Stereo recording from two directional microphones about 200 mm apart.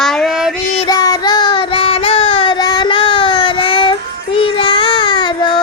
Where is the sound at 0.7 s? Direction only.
20° left (ahead or behind).